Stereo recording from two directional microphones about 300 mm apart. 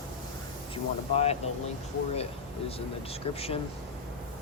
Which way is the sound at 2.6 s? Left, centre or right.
Centre.